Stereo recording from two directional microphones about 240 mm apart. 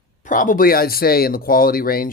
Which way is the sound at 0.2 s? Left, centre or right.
Left.